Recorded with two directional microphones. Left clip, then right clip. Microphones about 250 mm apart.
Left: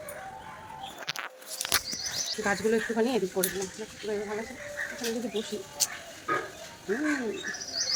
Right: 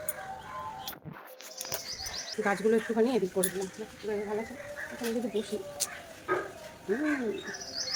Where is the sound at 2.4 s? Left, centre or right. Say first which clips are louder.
Right 1 dB; centre.